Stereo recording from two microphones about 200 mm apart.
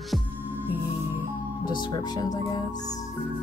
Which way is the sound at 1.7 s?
20° left (ahead or behind).